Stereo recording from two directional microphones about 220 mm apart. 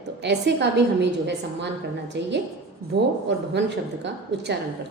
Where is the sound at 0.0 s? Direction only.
50° right (ahead or behind).